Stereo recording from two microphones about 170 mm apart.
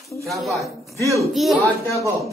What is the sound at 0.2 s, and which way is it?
A child's voice, centre (ahead or behind).